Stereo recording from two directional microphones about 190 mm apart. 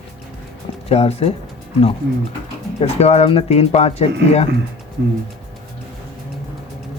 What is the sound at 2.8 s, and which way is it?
Speech, 35° left (ahead or behind).